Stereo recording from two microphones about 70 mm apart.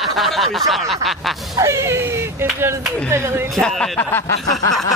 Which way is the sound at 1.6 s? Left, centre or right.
Right.